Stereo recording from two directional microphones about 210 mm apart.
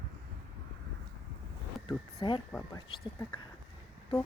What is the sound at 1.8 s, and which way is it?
Speech, 25° left (ahead or behind).